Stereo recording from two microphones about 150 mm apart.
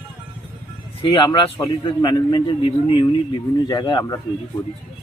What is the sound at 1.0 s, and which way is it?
A man's voice, 30° left (ahead or behind).